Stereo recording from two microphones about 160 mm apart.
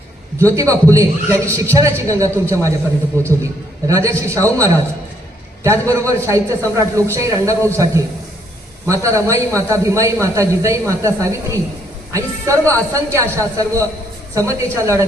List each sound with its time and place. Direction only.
0.3 s a man's voice: 20° right (ahead or behind)